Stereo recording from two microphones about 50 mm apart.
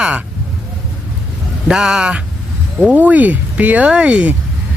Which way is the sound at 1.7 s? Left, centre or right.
Centre.